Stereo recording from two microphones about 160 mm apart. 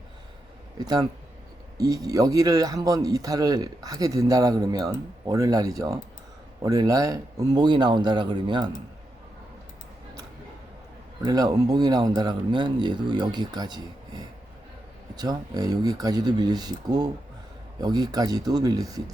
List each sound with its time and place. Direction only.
0.8 s speech: 25° right (ahead or behind)
11.2 s speech: 25° right (ahead or behind)